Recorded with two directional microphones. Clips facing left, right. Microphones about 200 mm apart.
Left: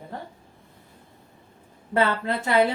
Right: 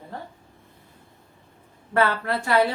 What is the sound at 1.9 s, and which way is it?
Speech, 20° left (ahead or behind).